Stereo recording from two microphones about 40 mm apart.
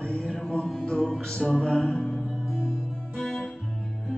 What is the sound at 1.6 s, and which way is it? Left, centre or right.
Music, left.